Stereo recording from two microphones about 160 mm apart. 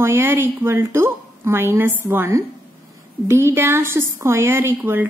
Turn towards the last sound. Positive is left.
turn(degrees=-15)  # may be behind; listen again after turning